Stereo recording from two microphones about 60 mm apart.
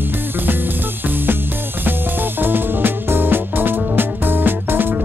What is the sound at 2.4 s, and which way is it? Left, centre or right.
Music, right.